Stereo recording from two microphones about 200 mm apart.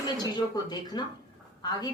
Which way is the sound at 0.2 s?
20° left (ahead or behind).